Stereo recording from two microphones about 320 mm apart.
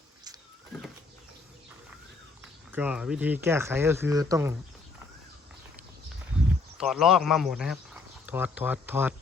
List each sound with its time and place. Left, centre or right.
2.4 s speech: centre
6.3 s a sound: centre
6.7 s speech: centre